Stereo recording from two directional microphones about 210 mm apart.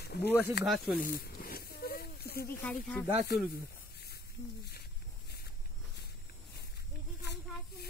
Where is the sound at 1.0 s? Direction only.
45° left (ahead or behind).